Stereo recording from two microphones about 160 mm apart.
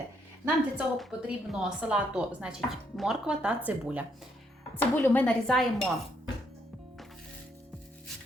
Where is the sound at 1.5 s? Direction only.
5° right (ahead or behind).